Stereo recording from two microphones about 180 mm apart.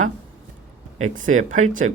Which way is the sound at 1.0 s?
45° right (ahead or behind).